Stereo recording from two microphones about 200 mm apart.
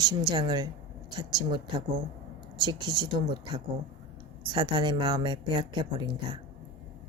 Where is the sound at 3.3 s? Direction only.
20° right (ahead or behind).